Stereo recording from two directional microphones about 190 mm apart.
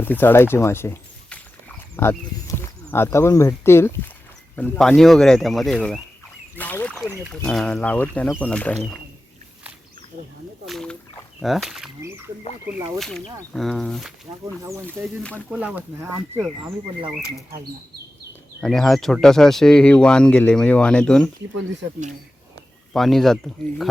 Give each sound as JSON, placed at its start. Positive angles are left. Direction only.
{"t": 0.0, "sound": "speech", "side_deg": 10}
{"t": 10.7, "sound": "speech", "side_deg": 5}
{"t": 13.0, "sound": "speech", "side_deg": 5}
{"t": 14.4, "sound": "speech", "side_deg": -15}
{"t": 15.2, "sound": "speech", "side_deg": 5}
{"t": 15.4, "sound": "speech", "side_deg": -5}
{"t": 16.6, "sound": "speech", "side_deg": -25}
{"t": 18.6, "sound": "speech", "side_deg": 0}
{"t": 22.9, "sound": "speech", "side_deg": 0}